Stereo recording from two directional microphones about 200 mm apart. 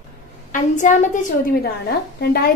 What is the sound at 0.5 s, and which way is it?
A woman's voice, 40° left (ahead or behind).